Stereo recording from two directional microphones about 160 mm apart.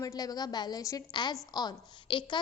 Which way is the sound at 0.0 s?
25° left (ahead or behind).